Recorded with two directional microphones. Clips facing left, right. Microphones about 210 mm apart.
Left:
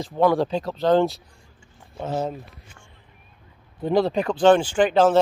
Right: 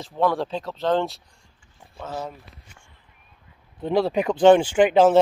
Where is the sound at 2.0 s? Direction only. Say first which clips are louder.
Left 6 dB; 25° left (ahead or behind).